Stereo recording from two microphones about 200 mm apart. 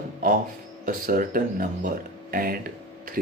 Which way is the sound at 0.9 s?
45° right (ahead or behind).